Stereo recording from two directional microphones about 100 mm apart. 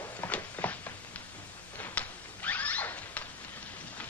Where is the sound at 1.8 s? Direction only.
15° left (ahead or behind).